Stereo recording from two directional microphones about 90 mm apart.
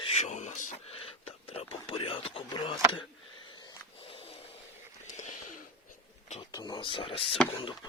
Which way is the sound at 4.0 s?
90° left.